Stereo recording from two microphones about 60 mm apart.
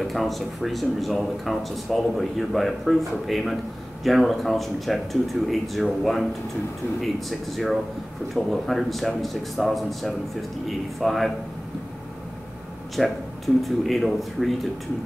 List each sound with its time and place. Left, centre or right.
0.0 s speech: centre
13.0 s speech: centre